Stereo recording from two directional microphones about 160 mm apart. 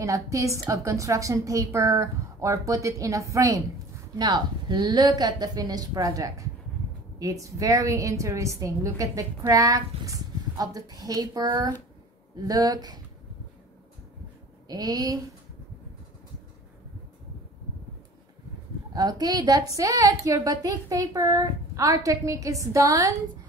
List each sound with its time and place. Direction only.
0.0 s a woman's voice: 20° right (ahead or behind)
14.7 s a woman's voice: 25° right (ahead or behind)
18.9 s a woman's voice: 20° right (ahead or behind)